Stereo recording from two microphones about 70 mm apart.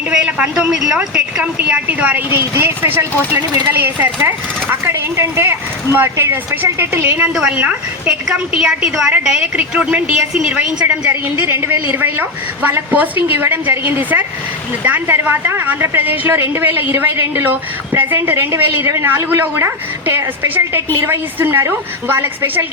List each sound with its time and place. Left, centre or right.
0.1 s a sound: centre
0.7 s a woman's voice: centre
1.4 s a woman's voice: right
2.3 s speech: right
7.3 s a woman's voice: centre
11.1 s a woman's voice: right